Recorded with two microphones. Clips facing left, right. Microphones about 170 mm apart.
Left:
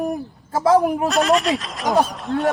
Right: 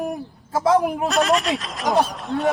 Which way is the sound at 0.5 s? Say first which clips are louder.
Left 2 dB; centre (ahead or behind).